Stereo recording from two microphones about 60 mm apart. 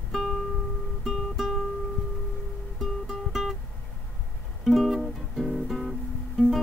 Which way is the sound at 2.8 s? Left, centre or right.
Centre.